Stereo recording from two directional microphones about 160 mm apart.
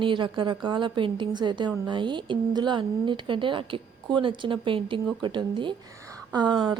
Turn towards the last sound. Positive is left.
turn(degrees=-30)  # may be behind; listen again after turning